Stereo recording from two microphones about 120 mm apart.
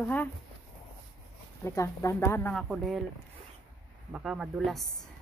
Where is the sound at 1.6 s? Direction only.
25° left (ahead or behind).